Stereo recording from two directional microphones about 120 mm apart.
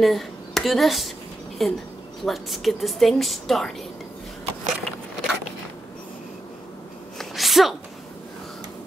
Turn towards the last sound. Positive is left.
turn(degrees=0)  # may be behind; listen again after turning